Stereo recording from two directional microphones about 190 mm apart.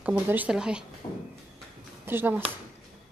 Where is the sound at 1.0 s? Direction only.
15° left (ahead or behind).